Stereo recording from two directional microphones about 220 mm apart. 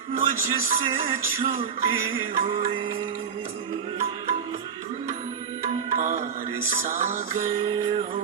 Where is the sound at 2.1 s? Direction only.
25° right (ahead or behind).